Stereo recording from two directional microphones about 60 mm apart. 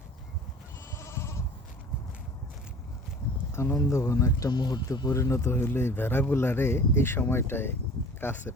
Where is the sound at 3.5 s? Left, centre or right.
Left.